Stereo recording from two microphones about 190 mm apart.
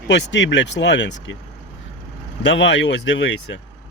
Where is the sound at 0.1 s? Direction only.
70° left (ahead or behind).